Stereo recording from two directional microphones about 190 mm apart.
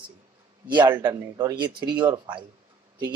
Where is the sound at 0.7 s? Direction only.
25° right (ahead or behind).